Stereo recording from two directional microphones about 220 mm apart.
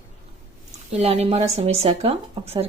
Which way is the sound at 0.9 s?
30° right (ahead or behind).